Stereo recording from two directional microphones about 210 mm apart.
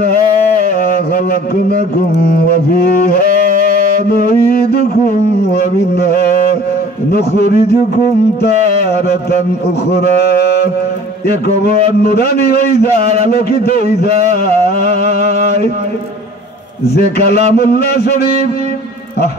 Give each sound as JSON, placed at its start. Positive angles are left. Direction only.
{"t": 2.2, "sound": "mantra", "side_deg": 50}
{"t": 5.9, "sound": "mantra", "side_deg": 50}
{"t": 12.0, "sound": "mantra", "side_deg": 50}
{"t": 13.7, "sound": "mantra", "side_deg": 50}
{"t": 14.9, "sound": "a sound", "side_deg": -35}
{"t": 16.9, "sound": "mantra", "side_deg": 50}